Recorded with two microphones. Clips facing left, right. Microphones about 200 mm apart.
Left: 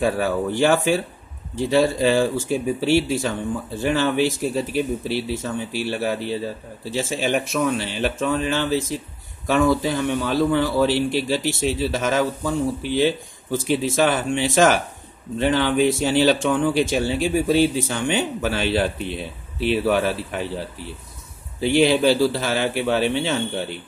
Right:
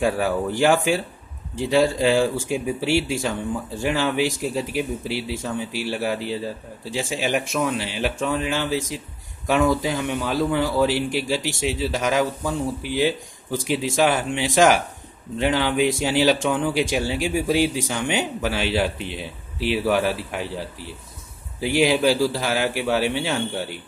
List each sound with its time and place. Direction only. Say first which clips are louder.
0.0 s speech: left 1 dB; 15° right (ahead or behind)
19.0 s speech: left 3 dB; 55° left (ahead or behind)
19.7 s speech: left 1 dB; 10° right (ahead or behind)
21.5 s speech: left 2 dB; 10° right (ahead or behind)